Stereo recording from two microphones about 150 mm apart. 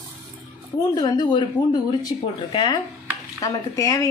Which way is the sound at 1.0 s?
30° left (ahead or behind).